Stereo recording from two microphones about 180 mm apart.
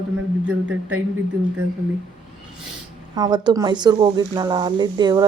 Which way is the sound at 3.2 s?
25° right (ahead or behind).